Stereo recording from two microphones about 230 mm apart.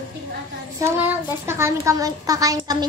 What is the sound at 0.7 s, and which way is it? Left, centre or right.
A woman's voice, centre.